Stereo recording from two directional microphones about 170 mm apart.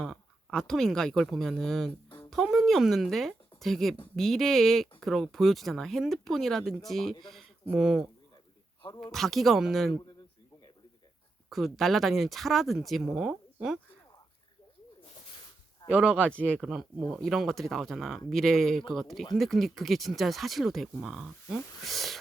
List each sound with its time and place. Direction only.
0.0 s speech: 5° left (ahead or behind)
9.1 s speech: centre (ahead or behind)
11.4 s speech: centre (ahead or behind)
15.9 s speech: 5° right (ahead or behind)
16.2 s speech: 10° left (ahead or behind)
16.6 s speech: 5° right (ahead or behind)